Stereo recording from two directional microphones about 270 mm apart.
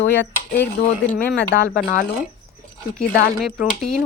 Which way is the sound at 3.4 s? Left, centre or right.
Centre.